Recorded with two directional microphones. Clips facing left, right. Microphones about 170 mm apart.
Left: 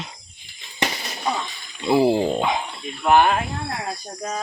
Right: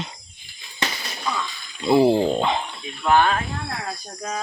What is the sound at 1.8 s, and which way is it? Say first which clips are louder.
Speech: right 1 dB; 5° left (ahead or behind).